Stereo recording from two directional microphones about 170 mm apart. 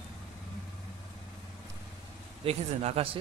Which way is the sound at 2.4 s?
35° right (ahead or behind).